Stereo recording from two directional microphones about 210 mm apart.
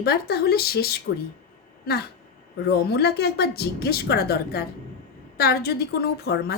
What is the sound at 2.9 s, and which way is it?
A woman's voice, 50° left (ahead or behind).